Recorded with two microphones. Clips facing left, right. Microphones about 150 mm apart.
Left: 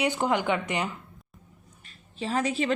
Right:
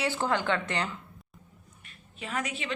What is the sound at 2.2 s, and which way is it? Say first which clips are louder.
Speech: left 8 dB; 30° left (ahead or behind).